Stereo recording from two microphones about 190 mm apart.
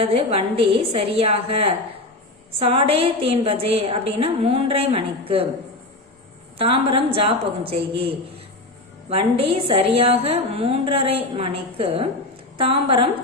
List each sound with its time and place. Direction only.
0.0 s a woman's voice: 30° right (ahead or behind)
6.6 s a woman's voice: 30° right (ahead or behind)